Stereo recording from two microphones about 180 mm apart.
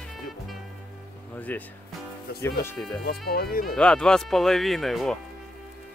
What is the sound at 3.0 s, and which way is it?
Speech, 60° left (ahead or behind).